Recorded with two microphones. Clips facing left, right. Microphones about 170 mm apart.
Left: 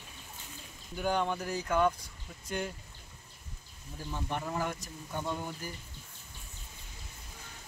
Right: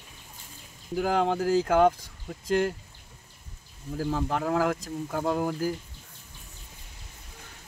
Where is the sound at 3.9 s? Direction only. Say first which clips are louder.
Right 9 dB; 90° right.